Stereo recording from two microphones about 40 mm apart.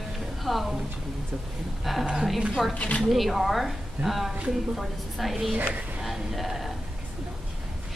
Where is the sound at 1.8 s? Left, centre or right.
Centre.